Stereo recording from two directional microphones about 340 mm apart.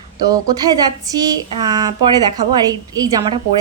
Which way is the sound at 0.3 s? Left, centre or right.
Centre.